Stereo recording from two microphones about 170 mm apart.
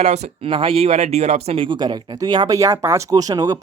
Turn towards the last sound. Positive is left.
turn(degrees=-20)  # may be behind; listen again after turning